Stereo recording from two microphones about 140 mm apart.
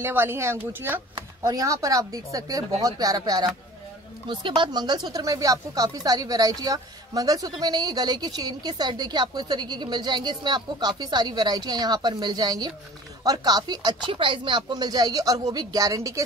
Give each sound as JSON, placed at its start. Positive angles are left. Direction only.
{"t": 0.0, "sound": "speech", "side_deg": -15}